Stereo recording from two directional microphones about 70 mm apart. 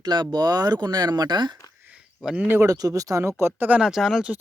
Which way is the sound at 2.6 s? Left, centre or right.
Right.